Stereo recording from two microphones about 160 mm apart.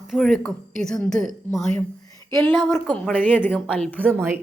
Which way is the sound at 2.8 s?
5° left (ahead or behind).